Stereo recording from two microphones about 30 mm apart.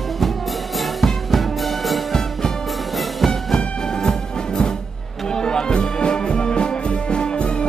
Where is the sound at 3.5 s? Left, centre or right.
Centre.